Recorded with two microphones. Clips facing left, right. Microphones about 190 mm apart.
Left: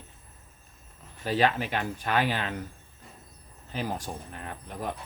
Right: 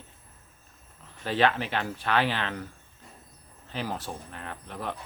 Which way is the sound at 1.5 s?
45° left (ahead or behind).